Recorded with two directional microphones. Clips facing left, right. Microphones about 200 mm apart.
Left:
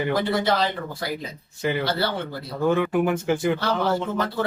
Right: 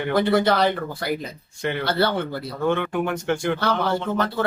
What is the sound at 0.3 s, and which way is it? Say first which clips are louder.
Speech: right 4 dB; 65° right (ahead or behind).